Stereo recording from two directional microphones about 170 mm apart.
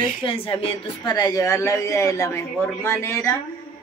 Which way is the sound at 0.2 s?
30° left (ahead or behind).